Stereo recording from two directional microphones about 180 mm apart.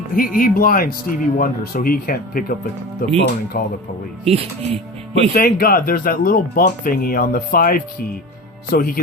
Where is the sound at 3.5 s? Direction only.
50° left (ahead or behind).